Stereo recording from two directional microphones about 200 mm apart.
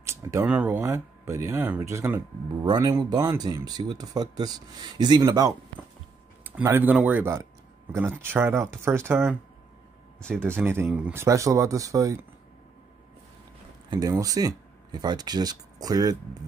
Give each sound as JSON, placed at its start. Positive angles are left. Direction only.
{"t": 0.0, "sound": "speech", "side_deg": -15}
{"t": 6.4, "sound": "speech", "side_deg": -10}
{"t": 10.6, "sound": "speech", "side_deg": -10}
{"t": 13.8, "sound": "speech", "side_deg": -15}